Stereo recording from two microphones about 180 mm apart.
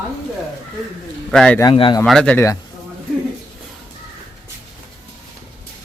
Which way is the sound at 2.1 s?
5° left (ahead or behind).